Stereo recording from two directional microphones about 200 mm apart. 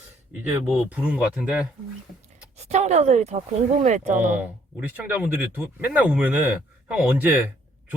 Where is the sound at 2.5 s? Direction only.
35° right (ahead or behind).